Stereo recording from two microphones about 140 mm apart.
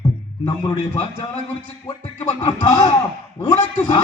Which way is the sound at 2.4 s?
35° left (ahead or behind).